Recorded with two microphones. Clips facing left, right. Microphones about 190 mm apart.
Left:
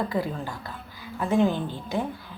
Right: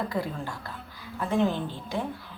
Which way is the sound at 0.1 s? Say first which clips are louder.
Left 3 dB; centre (ahead or behind).